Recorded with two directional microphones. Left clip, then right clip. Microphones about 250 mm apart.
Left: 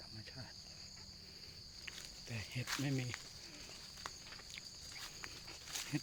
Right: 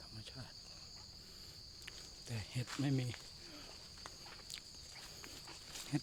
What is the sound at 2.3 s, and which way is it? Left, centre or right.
Speech, right.